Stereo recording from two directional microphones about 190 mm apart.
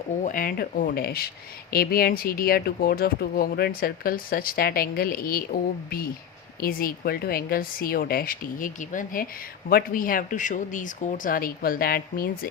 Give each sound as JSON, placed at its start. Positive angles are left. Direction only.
{"t": 0.2, "sound": "speech", "side_deg": 45}